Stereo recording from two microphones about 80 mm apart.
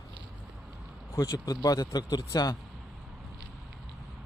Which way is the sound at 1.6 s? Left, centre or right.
Left.